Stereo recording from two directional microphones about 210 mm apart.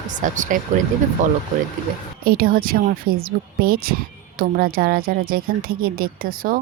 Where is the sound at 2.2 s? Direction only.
45° right (ahead or behind).